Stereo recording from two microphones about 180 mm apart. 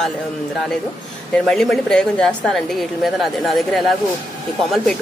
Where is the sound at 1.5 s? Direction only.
Centre (ahead or behind).